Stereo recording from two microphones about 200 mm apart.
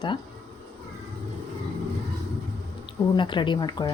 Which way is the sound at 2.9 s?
25° left (ahead or behind).